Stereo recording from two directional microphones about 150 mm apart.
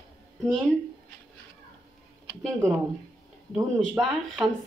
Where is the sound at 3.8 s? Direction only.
Centre (ahead or behind).